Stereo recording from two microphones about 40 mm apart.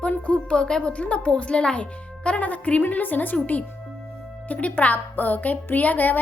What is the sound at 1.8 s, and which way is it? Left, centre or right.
Speech, left.